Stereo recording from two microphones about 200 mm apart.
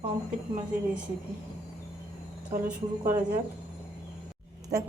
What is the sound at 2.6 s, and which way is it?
Speech, 40° right (ahead or behind).